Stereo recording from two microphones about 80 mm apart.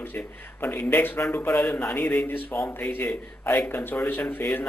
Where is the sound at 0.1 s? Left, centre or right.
Left.